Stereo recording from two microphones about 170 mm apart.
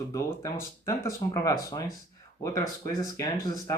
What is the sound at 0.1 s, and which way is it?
Speech, 15° left (ahead or behind).